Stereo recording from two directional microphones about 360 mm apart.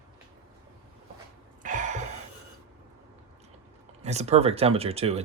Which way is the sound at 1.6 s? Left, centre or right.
Right.